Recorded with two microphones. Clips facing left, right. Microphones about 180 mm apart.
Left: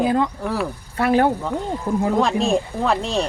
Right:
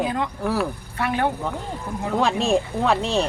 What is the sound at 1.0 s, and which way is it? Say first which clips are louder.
Speech: left 7 dB; 35° left (ahead or behind).